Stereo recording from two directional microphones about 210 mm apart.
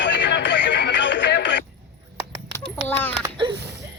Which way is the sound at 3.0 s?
10° left (ahead or behind).